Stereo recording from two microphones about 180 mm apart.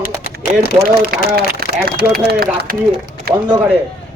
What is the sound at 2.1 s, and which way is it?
Speech, 55° right (ahead or behind).